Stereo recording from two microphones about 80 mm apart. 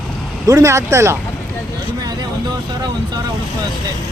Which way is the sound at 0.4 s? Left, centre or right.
Right.